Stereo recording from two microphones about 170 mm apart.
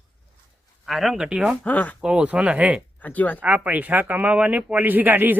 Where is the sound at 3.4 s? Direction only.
10° right (ahead or behind).